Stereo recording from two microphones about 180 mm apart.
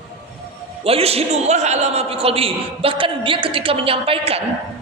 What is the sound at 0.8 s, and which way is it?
A man's voice, 35° right (ahead or behind).